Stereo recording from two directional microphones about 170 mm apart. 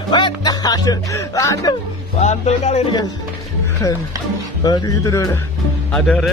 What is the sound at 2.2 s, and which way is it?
Speech, 40° left (ahead or behind).